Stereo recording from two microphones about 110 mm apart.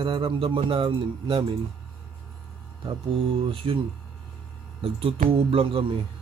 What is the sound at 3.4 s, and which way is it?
Speech, 50° right (ahead or behind).